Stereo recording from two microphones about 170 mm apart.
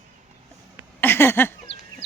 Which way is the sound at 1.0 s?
15° left (ahead or behind).